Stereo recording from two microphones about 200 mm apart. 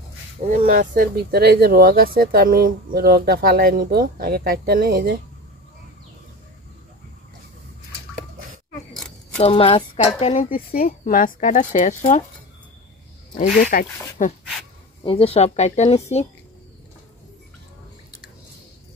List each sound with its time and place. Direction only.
0.4 s speech: 40° right (ahead or behind)
8.9 s a sound: centre (ahead or behind)
9.4 s speech: 25° left (ahead or behind)
10.5 s speech: 45° left (ahead or behind)
13.4 s speech: 45° left (ahead or behind)
15.0 s speech: 30° left (ahead or behind)